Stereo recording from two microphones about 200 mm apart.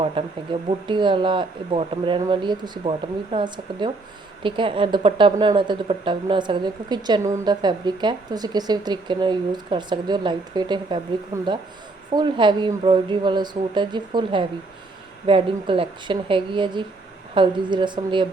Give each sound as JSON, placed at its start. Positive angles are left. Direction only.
{"t": 0.2, "sound": "a woman's voice", "side_deg": -25}